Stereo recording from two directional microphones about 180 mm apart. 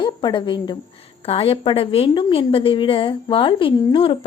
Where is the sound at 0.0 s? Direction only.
25° left (ahead or behind).